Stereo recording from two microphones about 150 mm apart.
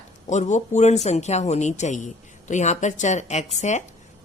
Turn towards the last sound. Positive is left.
turn(degrees=50)  # may be behind; listen again after turning